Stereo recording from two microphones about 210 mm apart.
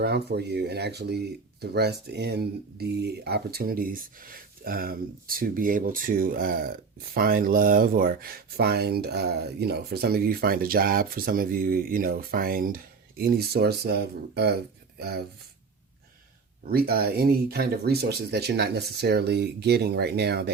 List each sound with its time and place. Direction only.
0.0 s speech: 50° right (ahead or behind)
16.6 s speech: 45° right (ahead or behind)